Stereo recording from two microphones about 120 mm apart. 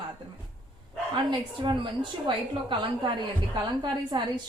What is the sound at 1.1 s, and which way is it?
A woman's voice, 40° right (ahead or behind).